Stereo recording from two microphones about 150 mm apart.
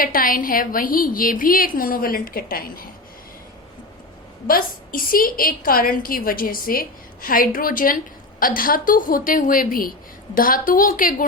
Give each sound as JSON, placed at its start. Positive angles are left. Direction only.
{"t": 0.0, "sound": "a woman's voice", "side_deg": 70}
{"t": 4.4, "sound": "a woman's voice", "side_deg": 75}